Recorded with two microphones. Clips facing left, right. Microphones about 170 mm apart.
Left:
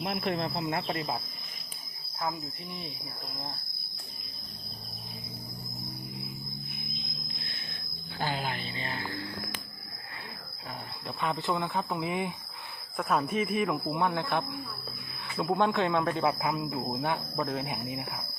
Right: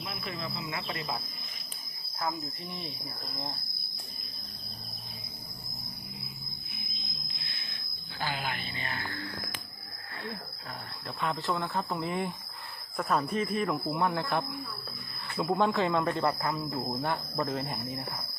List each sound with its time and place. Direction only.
0.0 s speech: 65° left (ahead or behind); by 1.0 s 45° left (ahead or behind)
7.3 s a sound: 45° left (ahead or behind); by 9.0 s 25° left (ahead or behind)
11.2 s speech: centre (ahead or behind)